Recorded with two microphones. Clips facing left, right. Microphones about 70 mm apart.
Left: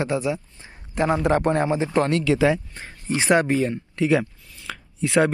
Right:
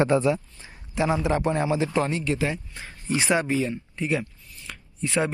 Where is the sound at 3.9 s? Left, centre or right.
Left.